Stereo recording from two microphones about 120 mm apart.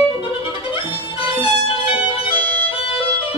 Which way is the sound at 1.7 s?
50° left (ahead or behind).